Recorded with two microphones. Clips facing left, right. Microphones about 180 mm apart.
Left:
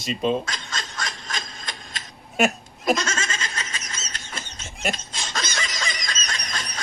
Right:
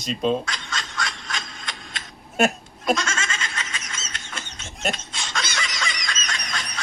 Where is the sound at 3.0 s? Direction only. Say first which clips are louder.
Even; 40° left (ahead or behind).